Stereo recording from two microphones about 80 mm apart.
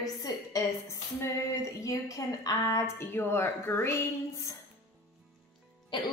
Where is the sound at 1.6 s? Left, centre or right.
Left.